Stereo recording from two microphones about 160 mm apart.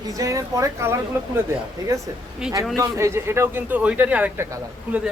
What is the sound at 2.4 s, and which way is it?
Speech, 5° right (ahead or behind).